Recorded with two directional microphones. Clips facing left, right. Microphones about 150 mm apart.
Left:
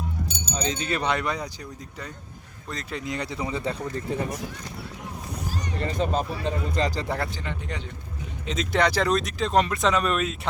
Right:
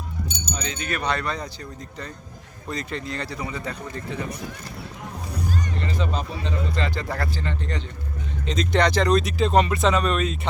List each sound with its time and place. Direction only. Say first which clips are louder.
0.5 s speech: left 3 dB; 30° left (ahead or behind); by 1.5 s 15° left (ahead or behind)
2.6 s speech: right 3 dB; centre (ahead or behind)
3.0 s speech: left 1 dB; 15° left (ahead or behind)
4.1 s speech: left 3 dB; 45° left (ahead or behind)
5.8 s speech: left 2 dB; 45° left (ahead or behind)
7.1 s speech: right 1 dB; 15° left (ahead or behind)
8.4 s speech: right 2 dB; 5° left (ahead or behind)